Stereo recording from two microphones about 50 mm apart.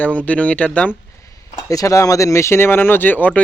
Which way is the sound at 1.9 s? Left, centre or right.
Left.